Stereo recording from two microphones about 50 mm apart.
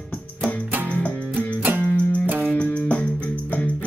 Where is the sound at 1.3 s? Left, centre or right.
Right.